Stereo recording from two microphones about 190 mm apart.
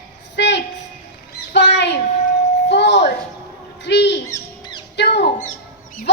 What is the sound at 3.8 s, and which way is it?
Owl, 65° left (ahead or behind).